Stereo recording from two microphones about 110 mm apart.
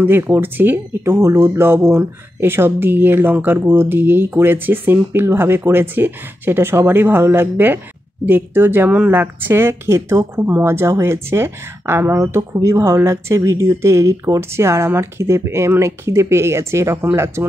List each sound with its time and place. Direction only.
0.0 s speech: 20° right (ahead or behind)